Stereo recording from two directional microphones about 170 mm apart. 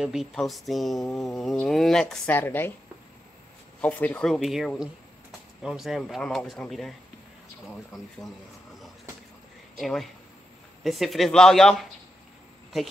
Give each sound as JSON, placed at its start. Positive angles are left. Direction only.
{"t": 0.0, "sound": "speech", "side_deg": 0}
{"t": 3.8, "sound": "speech", "side_deg": 10}
{"t": 9.8, "sound": "speech", "side_deg": 0}